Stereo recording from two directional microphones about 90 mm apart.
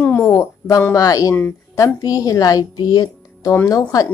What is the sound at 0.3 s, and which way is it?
Speech, 40° left (ahead or behind).